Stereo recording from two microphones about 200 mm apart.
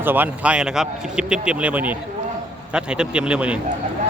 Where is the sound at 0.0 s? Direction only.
10° right (ahead or behind).